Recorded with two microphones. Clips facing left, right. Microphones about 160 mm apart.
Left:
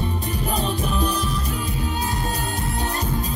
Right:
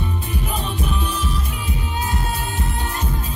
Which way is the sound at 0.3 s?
40° left (ahead or behind).